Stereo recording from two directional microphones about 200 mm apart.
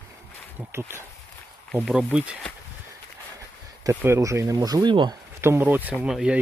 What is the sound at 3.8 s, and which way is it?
Speech, 15° right (ahead or behind).